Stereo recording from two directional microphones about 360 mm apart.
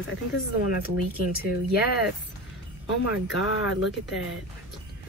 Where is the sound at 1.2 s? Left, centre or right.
Left.